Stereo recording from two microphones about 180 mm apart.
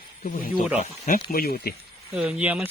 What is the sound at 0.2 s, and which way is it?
Speech, 50° left (ahead or behind).